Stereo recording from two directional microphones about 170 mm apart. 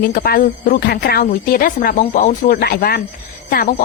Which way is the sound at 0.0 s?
60° left (ahead or behind).